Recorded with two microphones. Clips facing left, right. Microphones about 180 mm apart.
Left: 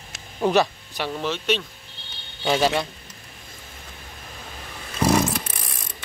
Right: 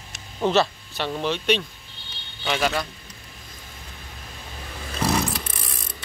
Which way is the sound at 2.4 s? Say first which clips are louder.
Left 3 dB; 30° left (ahead or behind).